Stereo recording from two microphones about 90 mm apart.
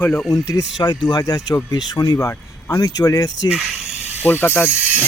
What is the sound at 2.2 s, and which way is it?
Speech, 30° left (ahead or behind).